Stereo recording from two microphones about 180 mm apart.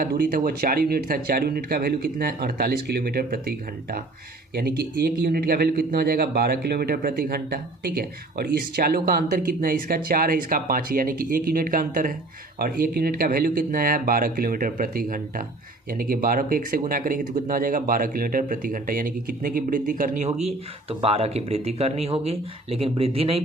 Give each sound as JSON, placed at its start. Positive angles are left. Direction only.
{"t": 0.0, "sound": "a man's voice", "side_deg": -55}
{"t": 4.5, "sound": "a man's voice", "side_deg": -60}